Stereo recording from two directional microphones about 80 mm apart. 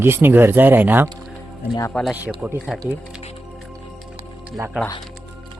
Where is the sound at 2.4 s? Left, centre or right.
Centre.